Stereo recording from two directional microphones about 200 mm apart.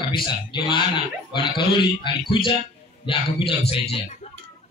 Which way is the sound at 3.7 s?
30° left (ahead or behind).